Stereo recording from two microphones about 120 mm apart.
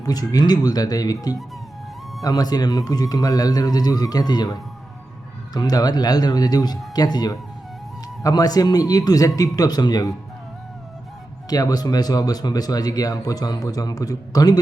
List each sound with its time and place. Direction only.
0.0 s speech: 30° left (ahead or behind)
5.5 s speech: 35° left (ahead or behind)
11.4 s speech: 30° left (ahead or behind)